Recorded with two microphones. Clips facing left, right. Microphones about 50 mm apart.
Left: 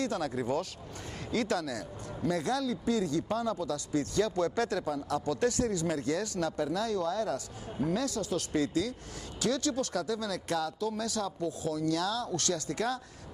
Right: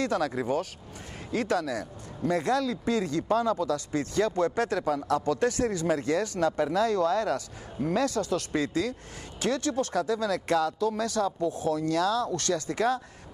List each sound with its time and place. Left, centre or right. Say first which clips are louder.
0.0 s speech: right 5 dB; right
0.3 s speech: right 3 dB; right
4.8 s speech: right 5 dB; right